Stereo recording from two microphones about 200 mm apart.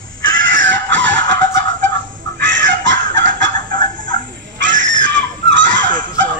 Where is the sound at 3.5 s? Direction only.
40° right (ahead or behind).